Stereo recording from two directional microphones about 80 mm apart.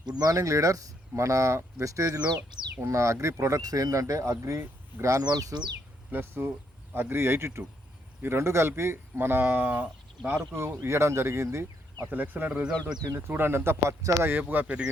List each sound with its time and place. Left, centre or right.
0.0 s speech: right
2.8 s speech: right
5.0 s speech: right
6.1 s speech: right
10.3 s speech: right
12.0 s speech: right